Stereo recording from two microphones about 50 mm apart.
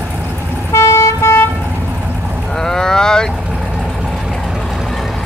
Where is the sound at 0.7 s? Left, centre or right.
Left.